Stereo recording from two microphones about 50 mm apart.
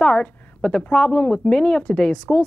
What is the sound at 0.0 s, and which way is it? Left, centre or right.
A woman's voice, centre.